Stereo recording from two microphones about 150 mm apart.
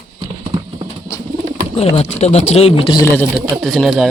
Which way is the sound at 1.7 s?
40° left (ahead or behind).